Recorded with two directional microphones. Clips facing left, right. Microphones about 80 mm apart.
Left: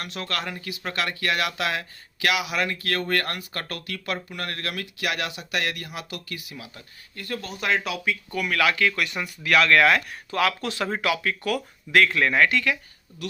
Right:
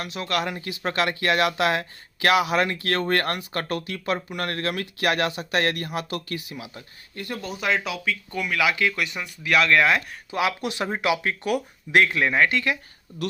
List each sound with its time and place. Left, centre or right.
0.0 s speech: centre
0.6 s speech: right
7.4 s speech: centre
8.4 s speech: centre
10.3 s speech: centre
12.3 s speech: centre
13.2 s speech: right